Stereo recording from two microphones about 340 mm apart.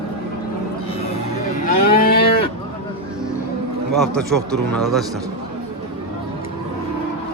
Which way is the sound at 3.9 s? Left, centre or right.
Centre.